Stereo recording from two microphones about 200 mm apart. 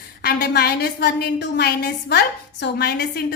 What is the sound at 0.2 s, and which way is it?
A woman's voice, 50° left (ahead or behind).